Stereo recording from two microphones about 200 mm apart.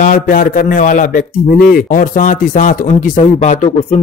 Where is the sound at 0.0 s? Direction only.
45° left (ahead or behind).